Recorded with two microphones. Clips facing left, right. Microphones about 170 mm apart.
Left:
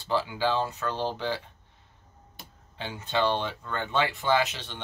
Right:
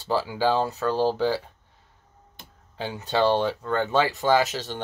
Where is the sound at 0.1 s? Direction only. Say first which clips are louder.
Right 4 dB; 40° right (ahead or behind).